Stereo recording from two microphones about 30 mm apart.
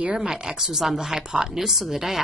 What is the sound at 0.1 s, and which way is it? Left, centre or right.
Speech, right.